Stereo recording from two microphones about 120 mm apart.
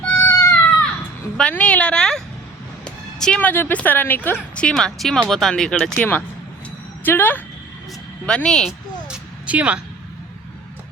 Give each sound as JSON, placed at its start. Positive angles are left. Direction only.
{"t": 0.0, "sound": "baby cry", "side_deg": 10}
{"t": 1.4, "sound": "speech", "side_deg": 10}
{"t": 9.0, "sound": "music", "side_deg": -10}